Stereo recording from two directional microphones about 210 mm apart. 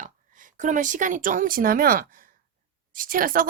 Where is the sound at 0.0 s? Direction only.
40° right (ahead or behind).